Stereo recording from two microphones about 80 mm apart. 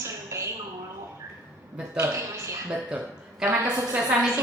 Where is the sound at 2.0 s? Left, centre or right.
Right.